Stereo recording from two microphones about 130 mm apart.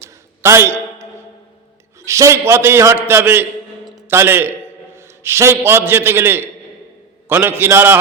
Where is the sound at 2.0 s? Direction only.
25° right (ahead or behind).